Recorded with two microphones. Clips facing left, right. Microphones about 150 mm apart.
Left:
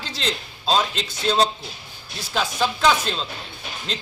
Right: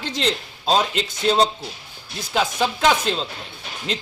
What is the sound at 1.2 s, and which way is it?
Speech, 15° right (ahead or behind).